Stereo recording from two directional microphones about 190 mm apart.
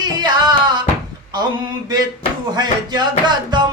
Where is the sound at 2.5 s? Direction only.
20° right (ahead or behind).